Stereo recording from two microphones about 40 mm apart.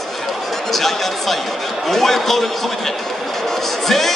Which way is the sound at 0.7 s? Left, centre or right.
Centre.